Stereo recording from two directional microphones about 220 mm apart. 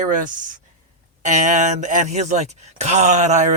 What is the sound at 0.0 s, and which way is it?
Speech, 35° right (ahead or behind).